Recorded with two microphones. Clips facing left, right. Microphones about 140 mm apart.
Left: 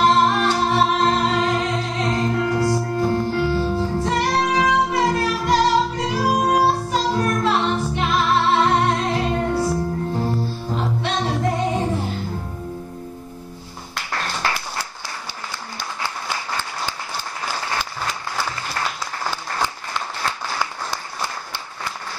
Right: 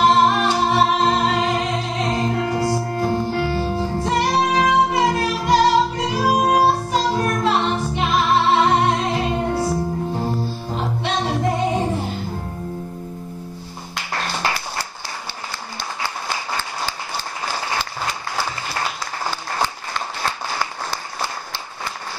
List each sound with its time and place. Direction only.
0.0 s music: 10° right (ahead or behind)
6.2 s music: 15° right (ahead or behind)
7.2 s music: 20° right (ahead or behind)
13.9 s music: 15° right (ahead or behind)